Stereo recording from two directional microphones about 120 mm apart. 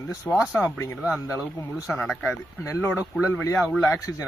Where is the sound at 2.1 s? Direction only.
10° left (ahead or behind).